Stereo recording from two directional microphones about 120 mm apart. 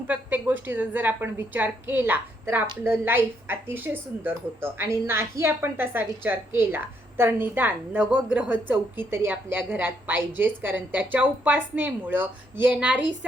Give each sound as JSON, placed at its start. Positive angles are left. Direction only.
{"t": 0.1, "sound": "a woman's voice", "side_deg": -15}